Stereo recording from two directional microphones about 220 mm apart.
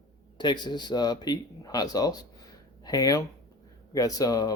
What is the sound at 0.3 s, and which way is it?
Speech, 20° left (ahead or behind).